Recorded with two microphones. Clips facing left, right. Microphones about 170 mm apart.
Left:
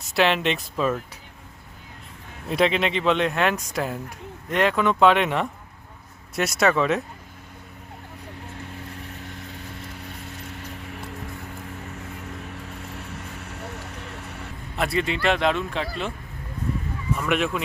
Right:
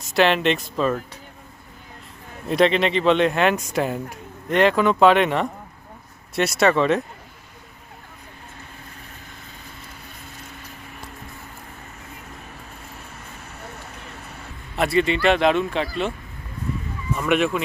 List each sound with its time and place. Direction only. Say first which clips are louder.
0.1 s speech: right 3 dB; centre (ahead or behind)
2.5 s speech: right 3 dB; 5° left (ahead or behind)
8.4 s vehicle: left 5 dB; 75° left (ahead or behind)
12.9 s vehicle: left 4 dB; 75° left (ahead or behind)
14.2 s a sound: left 2 dB; 70° left (ahead or behind)
14.8 s speech: right 5 dB; centre (ahead or behind)
17.2 s speech: right 5 dB; centre (ahead or behind)